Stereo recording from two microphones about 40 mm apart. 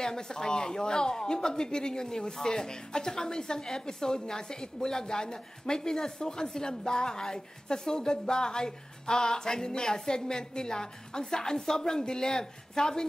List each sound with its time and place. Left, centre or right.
0.0 s speech: centre